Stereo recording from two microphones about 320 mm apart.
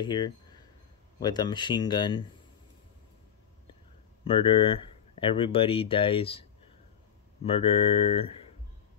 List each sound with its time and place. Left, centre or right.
0.0 s speech: centre
4.2 s speech: centre
7.4 s speech: centre